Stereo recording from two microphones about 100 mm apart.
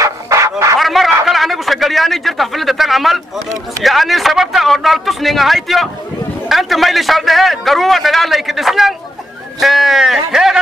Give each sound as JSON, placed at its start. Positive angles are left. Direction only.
{"t": 0.0, "sound": "music", "side_deg": -30}
{"t": 0.7, "sound": "snicker", "side_deg": 0}
{"t": 1.2, "sound": "a man's voice", "side_deg": 0}